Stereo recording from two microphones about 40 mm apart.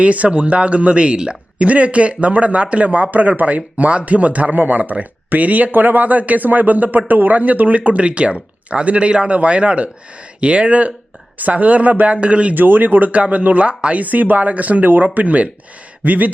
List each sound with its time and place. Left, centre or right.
0.0 s a man's voice: right
1.5 s a man's voice: right
8.0 s a man's voice: right
12.5 s a man's voice: right
16.0 s a sound: right